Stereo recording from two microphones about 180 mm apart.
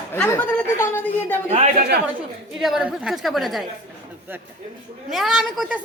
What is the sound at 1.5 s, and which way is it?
Speech, 40° right (ahead or behind).